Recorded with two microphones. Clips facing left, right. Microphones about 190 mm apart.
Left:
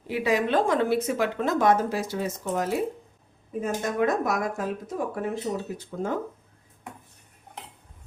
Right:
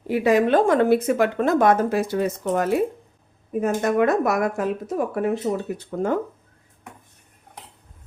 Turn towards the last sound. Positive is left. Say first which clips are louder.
# right 6 dB
turn(degrees=-65)  # may be behind; listen again after turning